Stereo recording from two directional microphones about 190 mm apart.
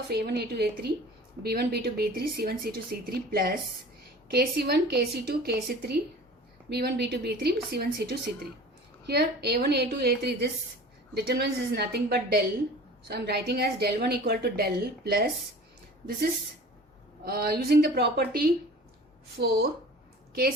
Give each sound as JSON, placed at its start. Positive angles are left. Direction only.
{"t": 0.1, "sound": "a woman's voice", "side_deg": -60}
{"t": 17.2, "sound": "a woman's voice", "side_deg": -55}